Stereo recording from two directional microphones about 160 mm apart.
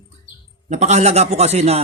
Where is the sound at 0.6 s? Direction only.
45° right (ahead or behind).